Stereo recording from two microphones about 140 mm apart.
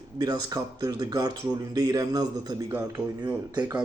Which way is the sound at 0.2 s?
25° right (ahead or behind).